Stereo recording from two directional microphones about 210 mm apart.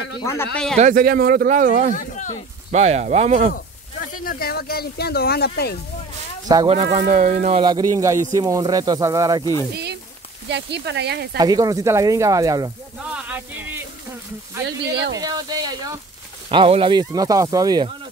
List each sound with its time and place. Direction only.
0.2 s speech: 10° left (ahead or behind)
0.7 s speech: 40° right (ahead or behind)
2.0 s speech: 35° left (ahead or behind)
2.7 s speech: 30° right (ahead or behind)
4.2 s speech: 45° left (ahead or behind)
6.5 s speech: 20° right (ahead or behind)
6.8 s speech: 35° right (ahead or behind)
8.0 s speech: 15° right (ahead or behind)
9.4 s speech: 15° left (ahead or behind)
10.5 s speech: 55° right (ahead or behind)
11.3 s speech: 15° right (ahead or behind)
13.1 s a sound: 5° right (ahead or behind)
15.1 s speech: 20° right (ahead or behind)